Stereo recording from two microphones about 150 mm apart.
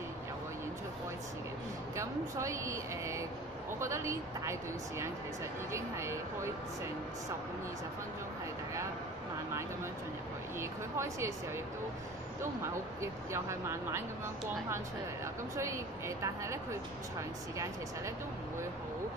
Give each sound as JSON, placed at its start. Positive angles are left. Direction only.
{"t": 2.0, "sound": "speech", "side_deg": -20}
{"t": 10.6, "sound": "speech", "side_deg": -20}
{"t": 13.0, "sound": "speech", "side_deg": -20}
{"t": 15.5, "sound": "speech", "side_deg": -20}